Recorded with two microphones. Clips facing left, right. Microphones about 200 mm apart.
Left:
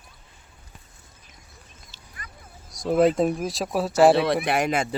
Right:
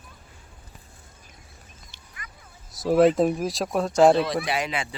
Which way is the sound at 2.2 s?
35° left (ahead or behind).